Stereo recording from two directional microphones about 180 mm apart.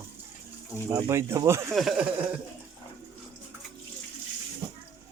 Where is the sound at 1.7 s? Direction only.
5° right (ahead or behind).